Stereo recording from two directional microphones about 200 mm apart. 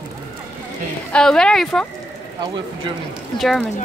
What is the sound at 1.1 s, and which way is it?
Speech, 5° left (ahead or behind).